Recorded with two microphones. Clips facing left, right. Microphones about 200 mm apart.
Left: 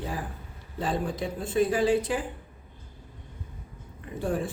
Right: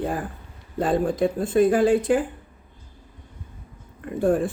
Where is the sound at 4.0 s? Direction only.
55° right (ahead or behind).